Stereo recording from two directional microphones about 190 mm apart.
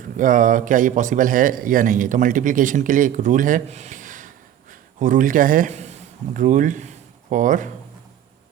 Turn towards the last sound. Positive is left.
turn(degrees=-45)  # may be behind; listen again after turning